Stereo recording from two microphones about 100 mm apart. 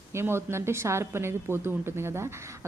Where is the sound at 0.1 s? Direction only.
25° right (ahead or behind).